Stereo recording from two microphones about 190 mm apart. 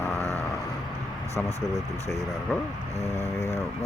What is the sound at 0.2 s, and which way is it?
Vehicle, 15° right (ahead or behind).